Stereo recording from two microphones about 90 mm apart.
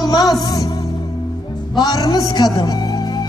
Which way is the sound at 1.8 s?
45° left (ahead or behind).